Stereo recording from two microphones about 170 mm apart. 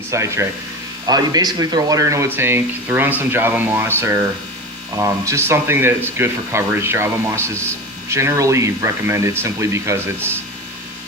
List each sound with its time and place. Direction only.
0.1 s speech: 15° right (ahead or behind)